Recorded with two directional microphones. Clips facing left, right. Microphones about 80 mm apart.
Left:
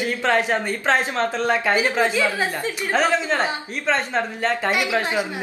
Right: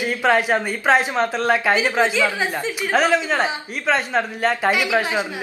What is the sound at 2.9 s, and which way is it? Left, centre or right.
A woman's voice, centre.